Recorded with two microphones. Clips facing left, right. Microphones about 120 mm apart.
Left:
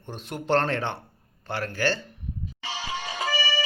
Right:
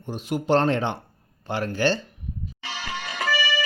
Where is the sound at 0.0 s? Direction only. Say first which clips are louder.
Right 7 dB; 10° right (ahead or behind).